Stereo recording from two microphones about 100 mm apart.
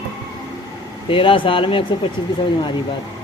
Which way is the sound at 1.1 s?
60° left (ahead or behind).